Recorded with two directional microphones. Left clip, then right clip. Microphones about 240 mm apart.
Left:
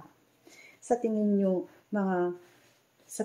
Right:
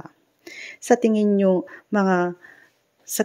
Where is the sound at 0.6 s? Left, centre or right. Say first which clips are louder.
Right 10 dB; right.